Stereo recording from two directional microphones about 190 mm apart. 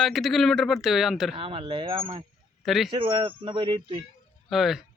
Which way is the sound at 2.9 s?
25° right (ahead or behind).